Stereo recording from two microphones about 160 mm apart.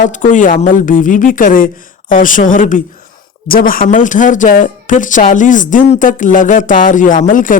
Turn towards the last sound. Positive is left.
turn(degrees=55)  # may be behind; listen again after turning